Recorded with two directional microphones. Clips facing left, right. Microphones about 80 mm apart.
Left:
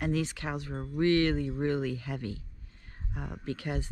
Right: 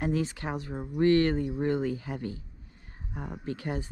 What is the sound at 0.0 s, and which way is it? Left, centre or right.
Speech, right.